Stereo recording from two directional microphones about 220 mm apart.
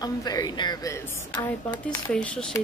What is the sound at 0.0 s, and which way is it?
A woman's voice, 15° left (ahead or behind).